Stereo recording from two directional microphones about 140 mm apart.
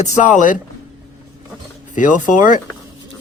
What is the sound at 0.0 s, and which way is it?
Speech, 60° left (ahead or behind).